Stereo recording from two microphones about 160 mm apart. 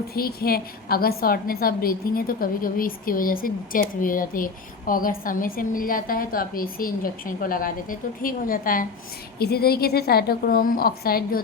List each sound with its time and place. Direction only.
0.1 s a woman's voice: 70° left (ahead or behind)
9.4 s a woman's voice: 80° left